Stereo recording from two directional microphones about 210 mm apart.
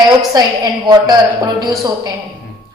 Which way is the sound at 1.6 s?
20° right (ahead or behind).